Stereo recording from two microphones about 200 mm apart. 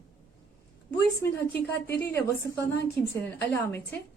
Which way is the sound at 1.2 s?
10° left (ahead or behind).